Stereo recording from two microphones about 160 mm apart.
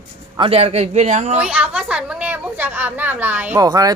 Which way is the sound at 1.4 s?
5° right (ahead or behind).